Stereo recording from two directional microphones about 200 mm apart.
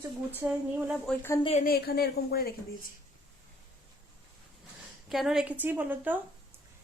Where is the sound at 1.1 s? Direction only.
10° left (ahead or behind).